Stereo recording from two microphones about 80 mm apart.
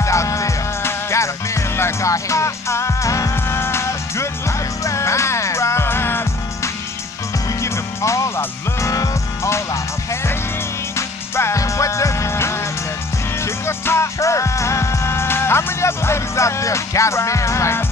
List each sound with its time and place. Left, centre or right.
0.0 s music: left
11.0 s music: left